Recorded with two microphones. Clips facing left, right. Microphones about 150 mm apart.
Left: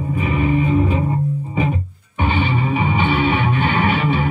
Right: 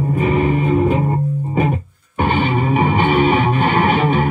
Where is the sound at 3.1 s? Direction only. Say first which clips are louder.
Right 4 dB; 35° right (ahead or behind).